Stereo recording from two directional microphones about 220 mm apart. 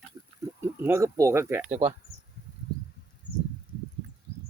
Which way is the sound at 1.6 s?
30° right (ahead or behind).